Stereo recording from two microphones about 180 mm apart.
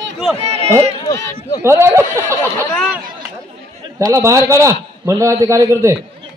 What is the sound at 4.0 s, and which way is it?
A man's voice, 15° right (ahead or behind).